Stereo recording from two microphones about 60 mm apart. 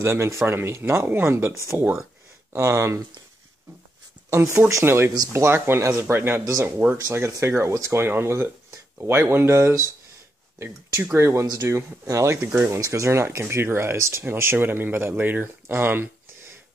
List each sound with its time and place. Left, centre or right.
0.0 s speech: right
4.4 s speech: right
4.8 s speech: right
7.2 s speech: right
8.0 s speech: right
11.1 s speech: right
12.1 s speech: right
12.5 s speech: right
12.8 s speech: right
15.7 s a sound: right